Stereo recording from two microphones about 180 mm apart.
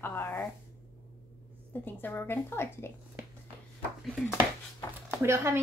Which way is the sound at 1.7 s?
10° left (ahead or behind).